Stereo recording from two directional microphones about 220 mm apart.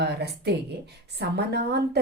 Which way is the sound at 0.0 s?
50° right (ahead or behind).